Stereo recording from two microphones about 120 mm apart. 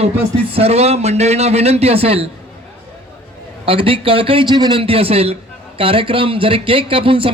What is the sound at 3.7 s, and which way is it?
A man's voice, 50° right (ahead or behind).